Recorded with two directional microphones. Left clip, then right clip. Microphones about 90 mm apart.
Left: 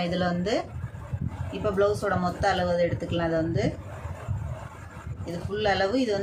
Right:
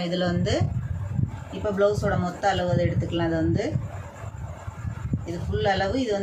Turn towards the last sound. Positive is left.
turn(degrees=45)  # may be behind; listen again after turning